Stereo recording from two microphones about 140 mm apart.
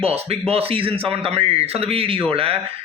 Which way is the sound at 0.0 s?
45° right (ahead or behind).